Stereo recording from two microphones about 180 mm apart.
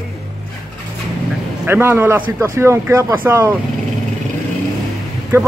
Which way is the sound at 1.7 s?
15° right (ahead or behind).